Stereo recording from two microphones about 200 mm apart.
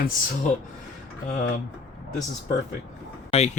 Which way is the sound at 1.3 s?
40° left (ahead or behind).